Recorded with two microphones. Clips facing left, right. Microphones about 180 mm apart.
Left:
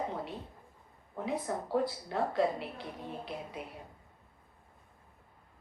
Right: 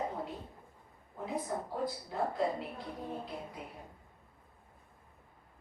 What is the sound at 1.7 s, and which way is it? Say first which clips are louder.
A woman's voice: left 5 dB; 80° left.